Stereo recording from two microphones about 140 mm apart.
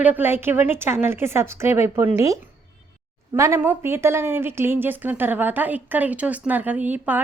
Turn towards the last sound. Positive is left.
turn(degrees=-10)  # may be behind; listen again after turning